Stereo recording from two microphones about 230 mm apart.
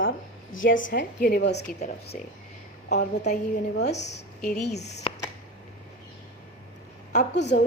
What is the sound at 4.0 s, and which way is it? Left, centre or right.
Speech, left.